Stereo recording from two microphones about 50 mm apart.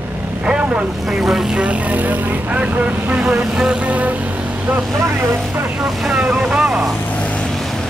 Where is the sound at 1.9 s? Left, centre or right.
Right.